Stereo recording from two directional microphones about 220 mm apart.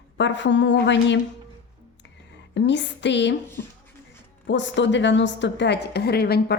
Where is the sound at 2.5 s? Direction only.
55° left (ahead or behind).